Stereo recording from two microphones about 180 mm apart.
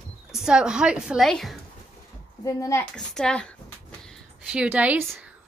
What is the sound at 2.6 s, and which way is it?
Speech, 15° left (ahead or behind).